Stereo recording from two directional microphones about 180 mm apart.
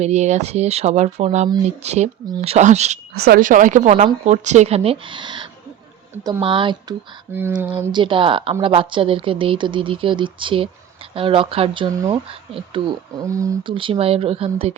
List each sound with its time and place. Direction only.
0.0 s speech: 40° right (ahead or behind)
3.2 s speech: 55° right (ahead or behind); by 6.9 s 25° right (ahead or behind)
7.3 s speech: 10° right (ahead or behind)
7.8 s speech: 25° right (ahead or behind)
13.2 s speech: 20° right (ahead or behind)
13.7 s speech: 30° right (ahead or behind)